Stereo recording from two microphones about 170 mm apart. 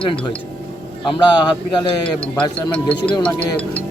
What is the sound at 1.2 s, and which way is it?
Speech, 25° left (ahead or behind).